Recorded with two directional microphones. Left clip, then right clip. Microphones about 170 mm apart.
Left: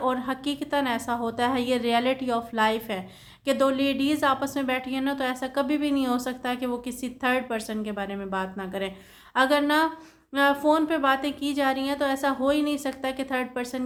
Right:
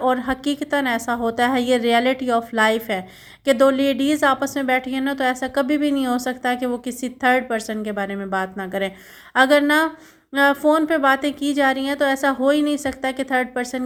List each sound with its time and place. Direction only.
0.0 s a woman's voice: 30° right (ahead or behind)